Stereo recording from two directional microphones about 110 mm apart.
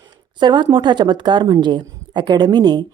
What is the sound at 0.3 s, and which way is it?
Speech, 45° right (ahead or behind).